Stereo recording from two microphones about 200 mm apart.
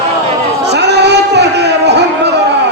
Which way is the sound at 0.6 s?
60° right (ahead or behind).